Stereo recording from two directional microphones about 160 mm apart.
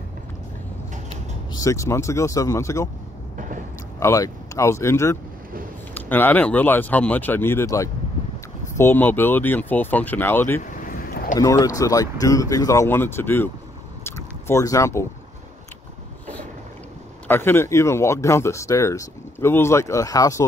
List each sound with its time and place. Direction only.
1.5 s speech: 20° left (ahead or behind)
3.3 s a sound: 55° right (ahead or behind)
4.0 s speech: 20° left (ahead or behind)
10.6 s vehicle: 65° left (ahead or behind)
11.3 s speech: 20° left (ahead or behind)
14.0 s a sound: 15° left (ahead or behind)
17.3 s speech: 15° left (ahead or behind)